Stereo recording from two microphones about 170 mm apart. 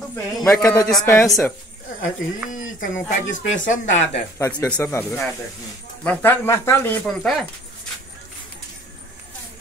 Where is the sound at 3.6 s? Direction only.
45° left (ahead or behind).